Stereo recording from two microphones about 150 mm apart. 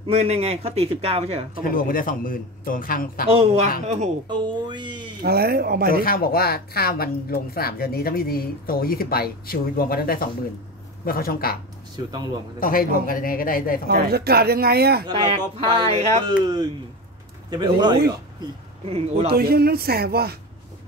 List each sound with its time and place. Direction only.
0.0 s a man's voice: 40° right (ahead or behind)
1.6 s a man's voice: 70° left (ahead or behind)
3.8 s a man's voice: 50° right (ahead or behind)
4.3 s speech: 30° right (ahead or behind)
5.2 s speech: 90° right
6.0 s speech: 75° left (ahead or behind)
12.5 s a man's voice: 70° left (ahead or behind)
13.8 s speech: 90° right
15.0 s speech: 35° right (ahead or behind)
17.5 s speech: 30° right (ahead or behind)
18.9 s speech: 40° right (ahead or behind)
19.3 s speech: 90° right